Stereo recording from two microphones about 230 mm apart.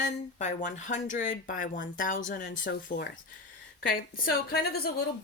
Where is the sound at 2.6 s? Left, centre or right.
Left.